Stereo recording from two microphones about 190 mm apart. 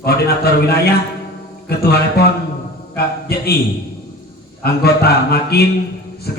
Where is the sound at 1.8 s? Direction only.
55° left (ahead or behind).